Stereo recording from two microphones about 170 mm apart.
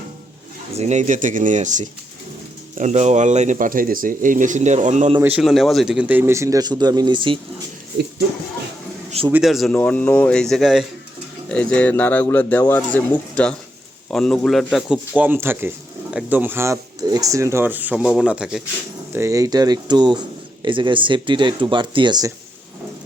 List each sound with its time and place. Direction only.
0.8 s speech: 45° right (ahead or behind)
5.2 s speech: 5° right (ahead or behind); by 7.3 s 30° right (ahead or behind)
9.0 s a sound: 35° right (ahead or behind)
9.3 s a man's voice: centre (ahead or behind)
19.1 s speech: 20° right (ahead or behind)